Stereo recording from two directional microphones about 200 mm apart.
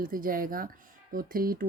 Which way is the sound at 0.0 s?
45° right (ahead or behind).